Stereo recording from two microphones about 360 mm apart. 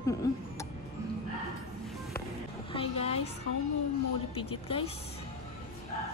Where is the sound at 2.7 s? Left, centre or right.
Centre.